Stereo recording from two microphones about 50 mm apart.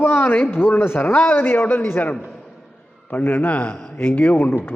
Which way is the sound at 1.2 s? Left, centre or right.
Left.